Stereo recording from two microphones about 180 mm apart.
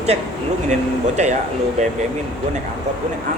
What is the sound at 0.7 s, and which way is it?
Speech, 40° right (ahead or behind).